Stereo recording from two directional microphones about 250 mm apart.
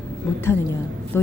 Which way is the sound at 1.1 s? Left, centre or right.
Centre.